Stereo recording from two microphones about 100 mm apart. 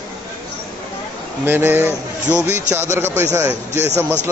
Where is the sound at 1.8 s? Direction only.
25° left (ahead or behind).